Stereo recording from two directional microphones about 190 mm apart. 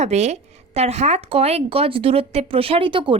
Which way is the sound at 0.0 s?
35° right (ahead or behind).